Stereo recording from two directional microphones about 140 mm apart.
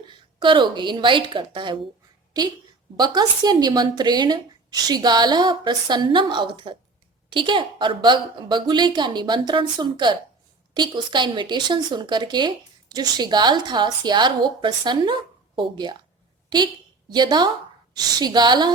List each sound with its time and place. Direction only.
0.3 s speech: 35° right (ahead or behind)
3.0 s speech: 30° right (ahead or behind)
17.1 s speech: 30° right (ahead or behind)